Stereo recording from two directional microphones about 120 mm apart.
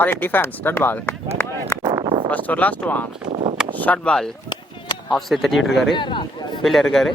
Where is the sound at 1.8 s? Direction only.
30° right (ahead or behind).